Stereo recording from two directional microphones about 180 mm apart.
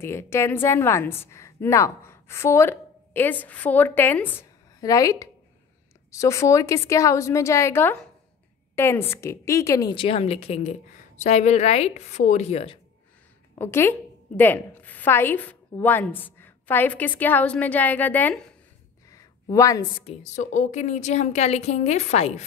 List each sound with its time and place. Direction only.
0.0 s a woman's voice: 15° left (ahead or behind); by 12.8 s 35° left (ahead or behind)
13.6 s a woman's voice: 15° left (ahead or behind)
19.5 s a woman's voice: 20° left (ahead or behind)
20.1 s a woman's voice: 40° left (ahead or behind)